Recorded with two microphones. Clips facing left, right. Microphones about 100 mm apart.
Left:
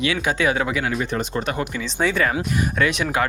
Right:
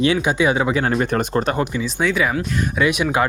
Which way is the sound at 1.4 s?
25° right (ahead or behind).